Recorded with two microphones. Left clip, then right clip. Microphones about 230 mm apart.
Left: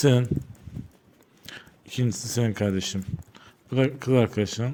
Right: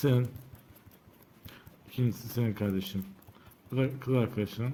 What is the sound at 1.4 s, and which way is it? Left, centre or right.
Speech, left.